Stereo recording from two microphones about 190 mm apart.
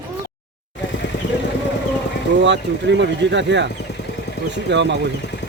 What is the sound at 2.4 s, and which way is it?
Speech, 70° right (ahead or behind).